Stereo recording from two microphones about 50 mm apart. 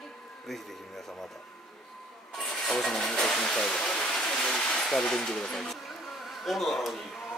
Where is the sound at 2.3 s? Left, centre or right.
Centre.